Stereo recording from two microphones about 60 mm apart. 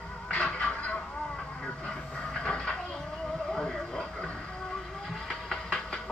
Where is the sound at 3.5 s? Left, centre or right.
Centre.